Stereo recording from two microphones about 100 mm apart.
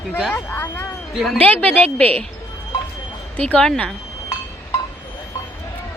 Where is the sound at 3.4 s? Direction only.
15° left (ahead or behind).